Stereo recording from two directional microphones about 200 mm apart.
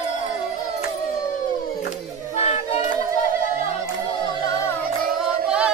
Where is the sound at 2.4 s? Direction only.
30° left (ahead or behind).